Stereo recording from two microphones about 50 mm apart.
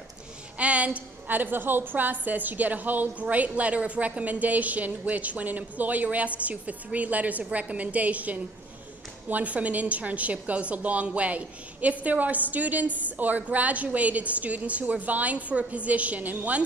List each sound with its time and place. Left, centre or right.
0.6 s a woman's voice: right